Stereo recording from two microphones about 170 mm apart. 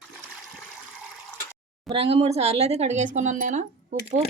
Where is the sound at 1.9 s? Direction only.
35° right (ahead or behind).